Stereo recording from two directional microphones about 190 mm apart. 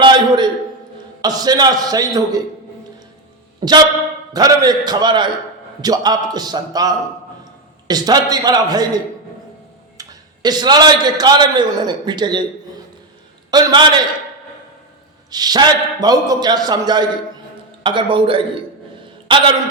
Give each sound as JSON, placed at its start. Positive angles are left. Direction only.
{"t": 0.0, "sound": "a sound", "side_deg": -25}
{"t": 1.2, "sound": "a man's voice", "side_deg": -20}
{"t": 3.6, "sound": "a man's voice", "side_deg": -25}
{"t": 10.0, "sound": "a man's voice", "side_deg": -20}
{"t": 13.5, "sound": "a man's voice", "side_deg": -20}
{"t": 15.3, "sound": "a man's voice", "side_deg": -20}